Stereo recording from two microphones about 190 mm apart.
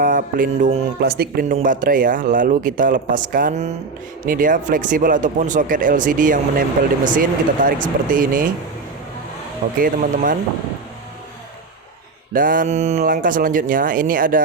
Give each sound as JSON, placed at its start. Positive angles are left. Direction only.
{"t": 0.0, "sound": "speech", "side_deg": -45}
{"t": 9.8, "sound": "speech", "side_deg": -45}
{"t": 12.3, "sound": "speech", "side_deg": -45}